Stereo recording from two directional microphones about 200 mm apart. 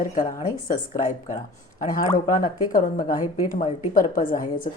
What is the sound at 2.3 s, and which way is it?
A woman's voice, 40° left (ahead or behind).